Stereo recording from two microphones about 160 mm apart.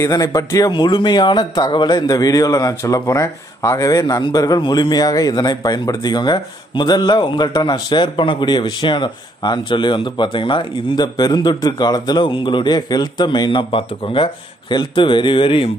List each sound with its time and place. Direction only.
0.0 s speech: 20° left (ahead or behind)